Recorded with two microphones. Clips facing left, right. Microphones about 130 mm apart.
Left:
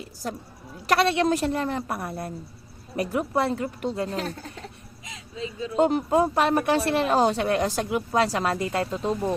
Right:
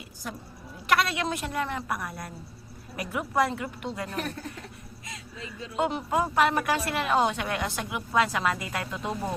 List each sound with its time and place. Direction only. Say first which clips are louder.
0.9 s a woman's voice: left 5 dB; 30° left (ahead or behind)